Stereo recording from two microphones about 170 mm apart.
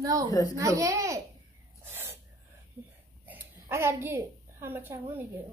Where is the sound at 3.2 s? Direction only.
10° right (ahead or behind).